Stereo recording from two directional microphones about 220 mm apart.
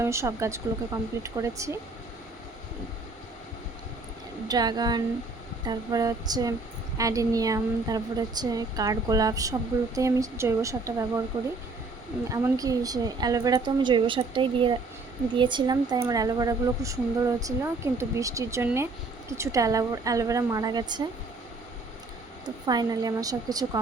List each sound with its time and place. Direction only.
0.0 s speech: 10° right (ahead or behind)
4.4 s speech: 20° right (ahead or behind)
12.3 s speech: 15° right (ahead or behind)
22.4 s speech: 20° right (ahead or behind)